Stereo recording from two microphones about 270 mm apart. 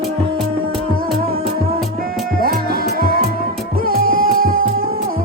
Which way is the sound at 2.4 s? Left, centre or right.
Right.